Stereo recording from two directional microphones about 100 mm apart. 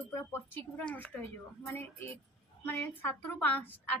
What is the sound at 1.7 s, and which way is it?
A woman's voice, 25° left (ahead or behind).